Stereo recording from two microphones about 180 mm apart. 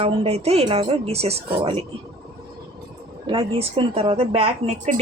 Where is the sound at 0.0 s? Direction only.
35° right (ahead or behind).